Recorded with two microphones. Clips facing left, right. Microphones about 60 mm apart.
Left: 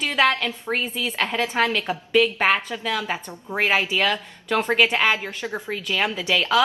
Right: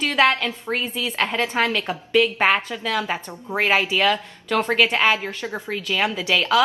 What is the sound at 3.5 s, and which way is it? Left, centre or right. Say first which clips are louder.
Speech: right 1 dB; centre.